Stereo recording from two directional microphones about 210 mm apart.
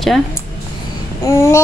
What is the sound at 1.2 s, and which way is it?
Speech, 15° left (ahead or behind).